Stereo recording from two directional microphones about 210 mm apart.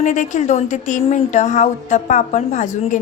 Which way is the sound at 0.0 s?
35° left (ahead or behind).